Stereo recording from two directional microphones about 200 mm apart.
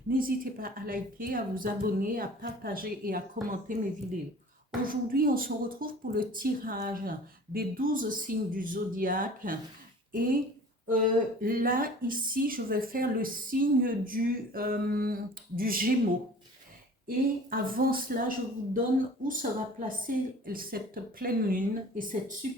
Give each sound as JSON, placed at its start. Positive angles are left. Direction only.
{"t": 0.1, "sound": "a woman's voice", "side_deg": -45}
{"t": 4.9, "sound": "a woman's voice", "side_deg": -45}
{"t": 17.5, "sound": "a woman's voice", "side_deg": -45}